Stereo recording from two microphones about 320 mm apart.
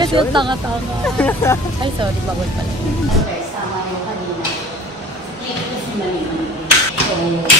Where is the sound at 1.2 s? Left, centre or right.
Centre.